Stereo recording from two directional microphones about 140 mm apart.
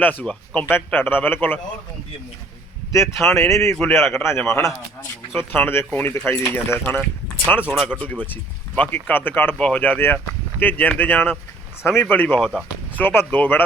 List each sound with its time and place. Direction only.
0.0 s speech: 10° left (ahead or behind)
3.2 s speech: 20° left (ahead or behind)
7.6 s speech: 5° right (ahead or behind)
7.9 s speech: 10° left (ahead or behind)